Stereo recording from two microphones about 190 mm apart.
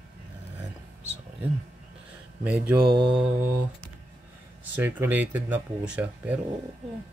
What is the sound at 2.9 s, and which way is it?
Mantra, 30° right (ahead or behind).